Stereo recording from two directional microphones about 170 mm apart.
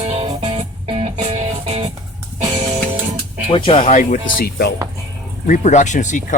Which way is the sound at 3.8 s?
45° left (ahead or behind).